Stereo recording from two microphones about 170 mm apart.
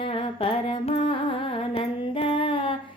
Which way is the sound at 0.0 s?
30° left (ahead or behind).